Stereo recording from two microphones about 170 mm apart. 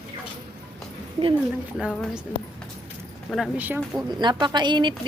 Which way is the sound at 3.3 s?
5° right (ahead or behind).